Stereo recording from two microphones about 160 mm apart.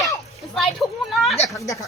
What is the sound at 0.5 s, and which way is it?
Speech, centre (ahead or behind).